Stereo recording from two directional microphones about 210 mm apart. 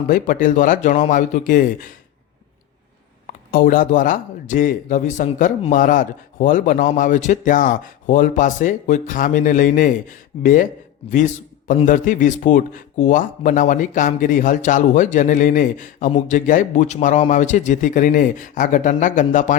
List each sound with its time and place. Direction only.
0.1 s speech: 40° left (ahead or behind)
3.2 s speech: 40° left (ahead or behind)
11.9 s speech: 40° left (ahead or behind)